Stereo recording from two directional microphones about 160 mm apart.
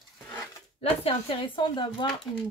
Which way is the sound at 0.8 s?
35° left (ahead or behind).